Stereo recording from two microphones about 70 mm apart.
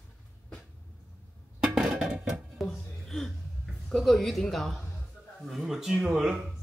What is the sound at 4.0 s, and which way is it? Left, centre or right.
Speech, centre.